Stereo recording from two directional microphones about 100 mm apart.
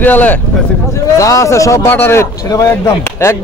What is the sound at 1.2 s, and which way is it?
Speech, 35° left (ahead or behind).